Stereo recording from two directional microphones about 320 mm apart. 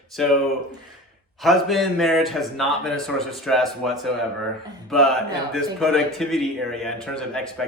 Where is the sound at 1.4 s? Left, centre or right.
Centre.